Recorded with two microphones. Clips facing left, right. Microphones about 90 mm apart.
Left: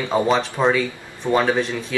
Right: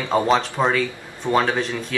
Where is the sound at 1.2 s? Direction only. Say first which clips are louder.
Even; 20° right (ahead or behind).